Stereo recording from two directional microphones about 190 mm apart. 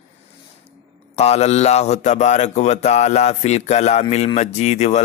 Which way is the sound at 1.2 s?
35° left (ahead or behind).